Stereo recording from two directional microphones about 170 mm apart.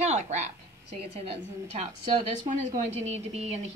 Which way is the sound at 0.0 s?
40° right (ahead or behind).